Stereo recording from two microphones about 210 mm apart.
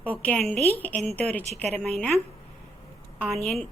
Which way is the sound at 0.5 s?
30° right (ahead or behind).